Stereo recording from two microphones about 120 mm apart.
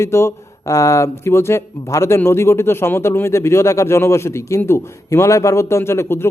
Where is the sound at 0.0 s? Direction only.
20° left (ahead or behind).